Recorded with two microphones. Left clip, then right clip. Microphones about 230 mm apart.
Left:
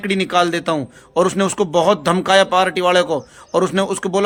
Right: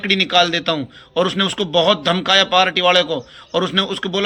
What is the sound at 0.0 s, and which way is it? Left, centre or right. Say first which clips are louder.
A man's voice: right 2 dB; centre.